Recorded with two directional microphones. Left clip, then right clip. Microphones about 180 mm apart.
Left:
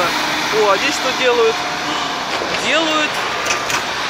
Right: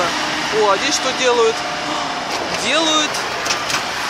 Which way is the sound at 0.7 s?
10° right (ahead or behind).